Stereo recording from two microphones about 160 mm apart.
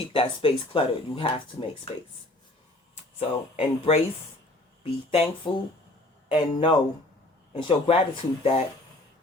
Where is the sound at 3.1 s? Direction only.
40° left (ahead or behind).